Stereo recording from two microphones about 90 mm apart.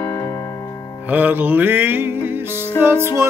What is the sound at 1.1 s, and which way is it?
Music, 20° right (ahead or behind).